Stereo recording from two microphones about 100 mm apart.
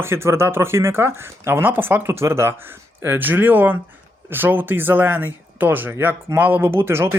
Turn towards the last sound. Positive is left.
turn(degrees=-25)  # may be behind; listen again after turning